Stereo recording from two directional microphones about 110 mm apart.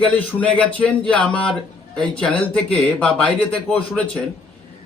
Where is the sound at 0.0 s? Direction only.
15° left (ahead or behind).